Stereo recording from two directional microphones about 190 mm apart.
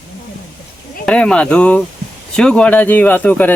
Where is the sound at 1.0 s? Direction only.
5° left (ahead or behind).